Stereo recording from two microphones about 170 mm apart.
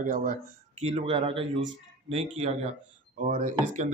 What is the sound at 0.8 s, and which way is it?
Speech, 35° right (ahead or behind).